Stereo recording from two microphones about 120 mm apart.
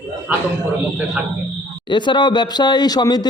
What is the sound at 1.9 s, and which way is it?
Speech, 40° left (ahead or behind).